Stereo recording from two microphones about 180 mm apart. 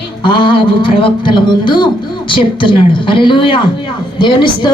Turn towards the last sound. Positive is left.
turn(degrees=25)  # may be behind; listen again after turning